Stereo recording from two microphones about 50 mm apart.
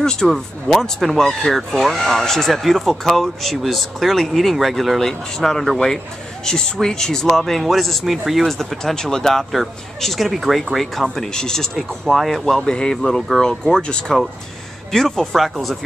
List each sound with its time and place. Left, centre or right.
0.0 s speech: centre
11.3 s speech: centre